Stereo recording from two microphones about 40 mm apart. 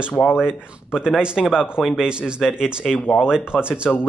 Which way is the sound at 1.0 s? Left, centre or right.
Right.